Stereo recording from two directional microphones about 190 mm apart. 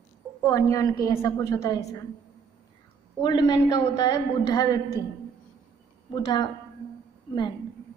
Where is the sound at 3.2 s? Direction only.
20° left (ahead or behind).